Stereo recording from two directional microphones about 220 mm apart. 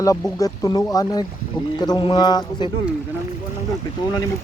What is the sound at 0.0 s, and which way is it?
Speech, 15° left (ahead or behind).